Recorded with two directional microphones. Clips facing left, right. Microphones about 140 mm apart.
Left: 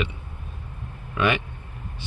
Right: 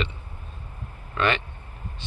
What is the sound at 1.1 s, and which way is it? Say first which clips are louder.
Speech: left 1 dB; 10° left (ahead or behind).